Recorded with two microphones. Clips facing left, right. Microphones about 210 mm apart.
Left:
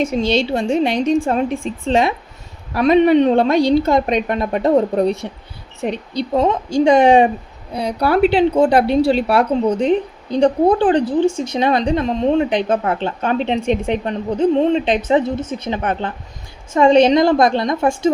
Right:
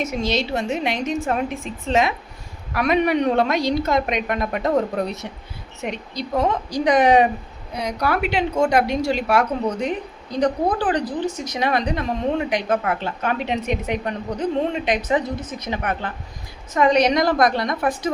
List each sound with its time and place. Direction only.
0.0 s a woman's voice: 30° left (ahead or behind)